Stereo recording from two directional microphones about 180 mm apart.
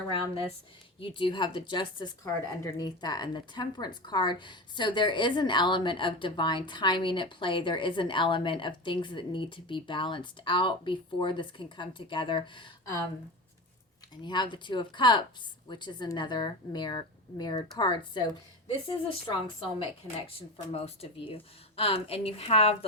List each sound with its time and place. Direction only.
0.9 s speech: 30° left (ahead or behind)
14.3 s speech: 25° left (ahead or behind)
20.7 s speech: 35° left (ahead or behind)